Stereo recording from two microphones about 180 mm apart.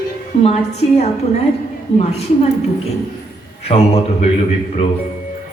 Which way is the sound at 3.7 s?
35° left (ahead or behind).